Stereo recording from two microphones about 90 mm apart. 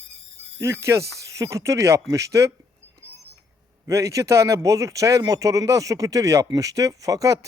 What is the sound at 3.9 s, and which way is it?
Speech, 35° right (ahead or behind).